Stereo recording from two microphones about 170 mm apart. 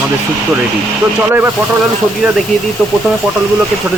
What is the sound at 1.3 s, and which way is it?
Speech, 10° right (ahead or behind).